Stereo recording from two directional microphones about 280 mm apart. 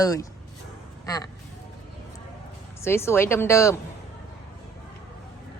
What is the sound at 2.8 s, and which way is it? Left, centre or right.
Speech, centre.